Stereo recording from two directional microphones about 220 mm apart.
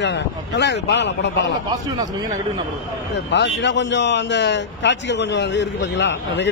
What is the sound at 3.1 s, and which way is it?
A man's voice, 50° left (ahead or behind).